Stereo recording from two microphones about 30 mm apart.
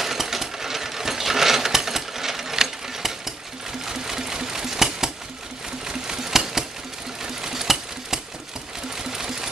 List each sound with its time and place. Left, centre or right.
0.0 s coin: centre
3.8 s sewing machine: centre
7.2 s a sound: centre
8.9 s sewing machine: centre